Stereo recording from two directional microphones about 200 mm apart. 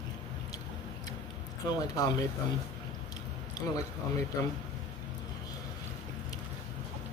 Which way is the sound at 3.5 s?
20° left (ahead or behind).